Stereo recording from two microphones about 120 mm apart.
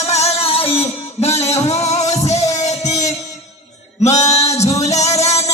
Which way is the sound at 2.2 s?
65° left (ahead or behind).